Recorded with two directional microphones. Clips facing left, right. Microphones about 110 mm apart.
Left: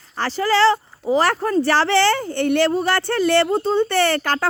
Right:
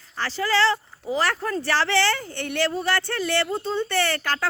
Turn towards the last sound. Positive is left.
turn(degrees=55)  # may be behind; listen again after turning